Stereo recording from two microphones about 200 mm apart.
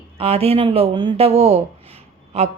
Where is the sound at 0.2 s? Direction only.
30° right (ahead or behind).